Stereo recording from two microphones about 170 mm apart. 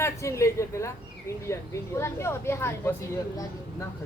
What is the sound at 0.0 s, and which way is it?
Speech, 15° left (ahead or behind).